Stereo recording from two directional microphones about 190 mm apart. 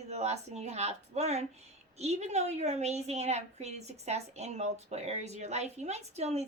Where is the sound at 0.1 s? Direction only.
35° right (ahead or behind).